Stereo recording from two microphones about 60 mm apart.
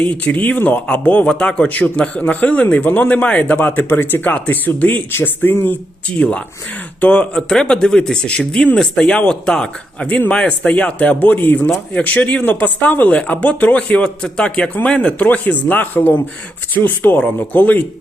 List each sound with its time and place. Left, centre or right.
0.0 s a man's voice: left
6.1 s a man's voice: left